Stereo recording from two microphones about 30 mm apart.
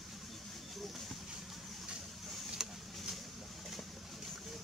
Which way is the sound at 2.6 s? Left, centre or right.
Centre.